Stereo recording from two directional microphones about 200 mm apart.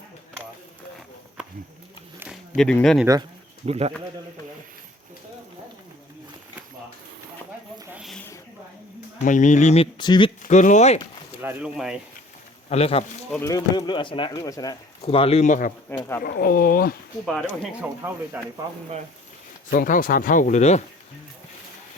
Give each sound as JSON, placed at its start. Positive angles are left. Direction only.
{"t": 2.1, "sound": "a sound", "side_deg": -5}
{"t": 3.7, "sound": "speech", "side_deg": -30}
{"t": 7.8, "sound": "a sound", "side_deg": -10}
{"t": 8.0, "sound": "a sound", "side_deg": 5}
{"t": 9.2, "sound": "speech", "side_deg": 40}
{"t": 10.5, "sound": "speech", "side_deg": 35}
{"t": 11.4, "sound": "speech", "side_deg": -5}
{"t": 12.6, "sound": "speech", "side_deg": 30}
{"t": 13.4, "sound": "speech", "side_deg": 20}
{"t": 15.0, "sound": "speech", "side_deg": 30}
{"t": 16.0, "sound": "speech", "side_deg": 10}
{"t": 16.2, "sound": "speech", "side_deg": 45}
{"t": 17.8, "sound": "speech", "side_deg": -5}
{"t": 19.7, "sound": "speech", "side_deg": 45}